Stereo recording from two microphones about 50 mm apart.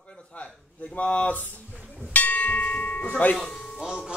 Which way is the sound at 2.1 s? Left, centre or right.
Left.